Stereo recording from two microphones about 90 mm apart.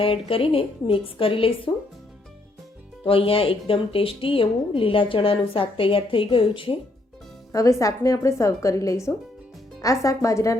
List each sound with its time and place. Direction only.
0.0 s a woman's voice: 90° left
3.0 s speech: 90° left; by 6.7 s 70° left (ahead or behind)
7.5 s speech: 35° left (ahead or behind)